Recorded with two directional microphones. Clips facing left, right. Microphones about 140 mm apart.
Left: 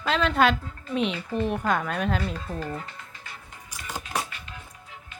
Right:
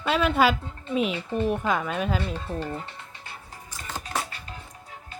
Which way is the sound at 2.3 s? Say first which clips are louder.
Right 1 dB; 25° right (ahead or behind).